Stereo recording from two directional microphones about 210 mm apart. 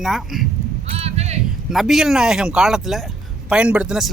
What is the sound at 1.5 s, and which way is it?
A man's voice, centre (ahead or behind).